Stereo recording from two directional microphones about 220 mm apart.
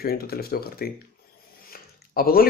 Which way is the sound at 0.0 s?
45° left (ahead or behind).